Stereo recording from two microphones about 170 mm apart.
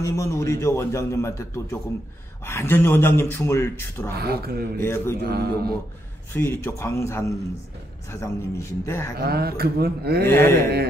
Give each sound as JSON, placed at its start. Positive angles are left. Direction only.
{"t": 0.0, "sound": "a man's voice", "side_deg": 15}
{"t": 4.1, "sound": "speech", "side_deg": -65}
{"t": 4.8, "sound": "a man's voice", "side_deg": 15}
{"t": 5.2, "sound": "speech", "side_deg": -65}
{"t": 6.3, "sound": "a man's voice", "side_deg": 15}
{"t": 9.1, "sound": "speech", "side_deg": -65}
{"t": 10.2, "sound": "a man's voice", "side_deg": 15}